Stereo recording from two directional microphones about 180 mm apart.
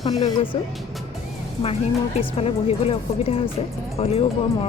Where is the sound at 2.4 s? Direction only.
35° left (ahead or behind).